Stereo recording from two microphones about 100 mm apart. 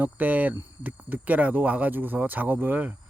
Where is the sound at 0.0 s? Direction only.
15° right (ahead or behind).